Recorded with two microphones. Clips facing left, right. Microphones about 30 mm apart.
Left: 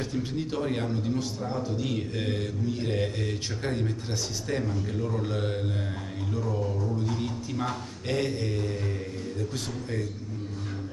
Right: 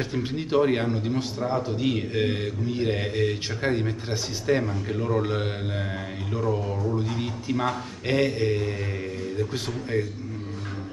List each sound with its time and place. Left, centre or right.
0.1 s a man's voice: right